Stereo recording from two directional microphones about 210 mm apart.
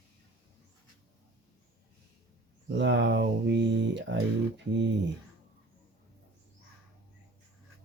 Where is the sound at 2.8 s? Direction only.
55° right (ahead or behind).